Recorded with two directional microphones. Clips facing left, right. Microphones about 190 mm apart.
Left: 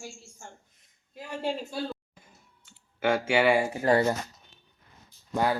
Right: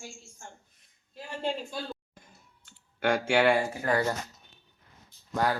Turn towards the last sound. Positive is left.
turn(degrees=15)  # may be behind; listen again after turning